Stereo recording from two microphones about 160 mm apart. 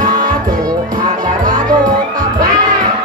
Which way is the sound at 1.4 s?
60° right (ahead or behind).